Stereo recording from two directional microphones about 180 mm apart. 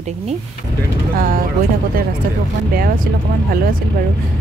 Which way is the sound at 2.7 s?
50° right (ahead or behind).